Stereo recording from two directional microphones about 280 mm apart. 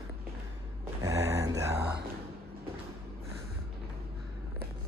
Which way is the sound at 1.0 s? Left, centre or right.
Centre.